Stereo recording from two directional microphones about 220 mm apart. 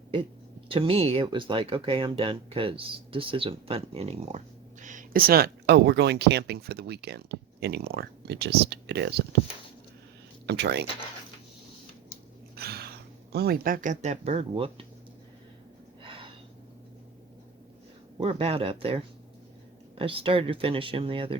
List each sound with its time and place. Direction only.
0.7 s speech: 25° right (ahead or behind); by 9.4 s 50° right (ahead or behind)
10.4 s speech: 50° right (ahead or behind)
12.5 s a sound: 45° right (ahead or behind)
13.3 s speech: 45° right (ahead or behind); by 14.8 s 25° right (ahead or behind)
16.0 s gasp: 25° right (ahead or behind)
18.2 s speech: 25° right (ahead or behind)